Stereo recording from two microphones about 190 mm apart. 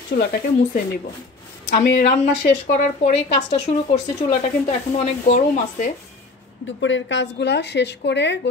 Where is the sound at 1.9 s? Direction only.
35° left (ahead or behind).